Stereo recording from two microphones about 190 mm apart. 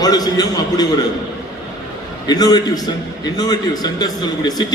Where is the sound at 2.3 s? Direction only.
20° left (ahead or behind).